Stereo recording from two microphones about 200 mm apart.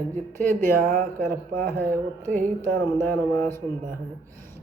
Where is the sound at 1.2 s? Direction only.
10° left (ahead or behind).